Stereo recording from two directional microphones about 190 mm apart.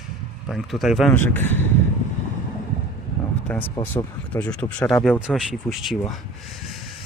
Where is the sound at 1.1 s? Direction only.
10° left (ahead or behind).